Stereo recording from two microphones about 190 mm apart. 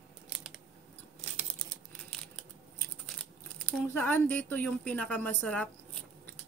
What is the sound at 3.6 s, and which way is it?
A woman's voice, 10° left (ahead or behind).